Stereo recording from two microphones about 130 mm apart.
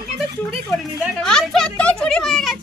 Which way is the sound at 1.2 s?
5° left (ahead or behind).